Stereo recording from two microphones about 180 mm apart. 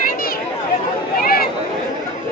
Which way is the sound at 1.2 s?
55° left (ahead or behind).